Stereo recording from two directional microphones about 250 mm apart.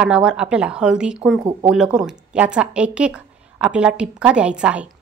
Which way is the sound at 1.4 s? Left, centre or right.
Centre.